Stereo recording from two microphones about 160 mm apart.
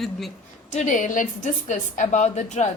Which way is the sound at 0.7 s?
50° left (ahead or behind).